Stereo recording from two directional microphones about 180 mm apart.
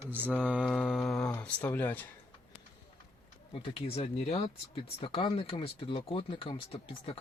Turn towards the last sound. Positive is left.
turn(degrees=30)  # may be behind; listen again after turning